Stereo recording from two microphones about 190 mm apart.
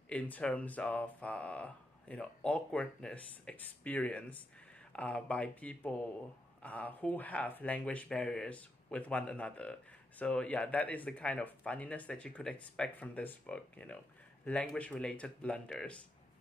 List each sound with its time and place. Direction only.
0.1 s speech: 5° left (ahead or behind)